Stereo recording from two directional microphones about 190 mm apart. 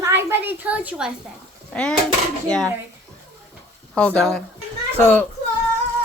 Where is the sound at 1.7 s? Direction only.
5° left (ahead or behind).